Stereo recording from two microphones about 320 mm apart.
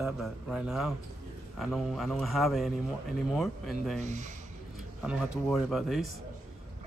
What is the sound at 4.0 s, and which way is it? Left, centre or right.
Speech, right.